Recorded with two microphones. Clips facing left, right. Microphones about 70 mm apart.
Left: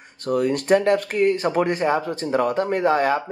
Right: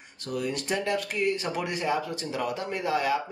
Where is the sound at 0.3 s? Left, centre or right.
Left.